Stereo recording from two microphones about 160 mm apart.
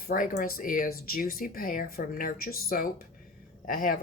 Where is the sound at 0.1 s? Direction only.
60° left (ahead or behind).